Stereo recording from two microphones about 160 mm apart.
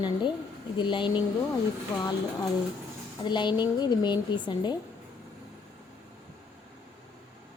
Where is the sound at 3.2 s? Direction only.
30° left (ahead or behind).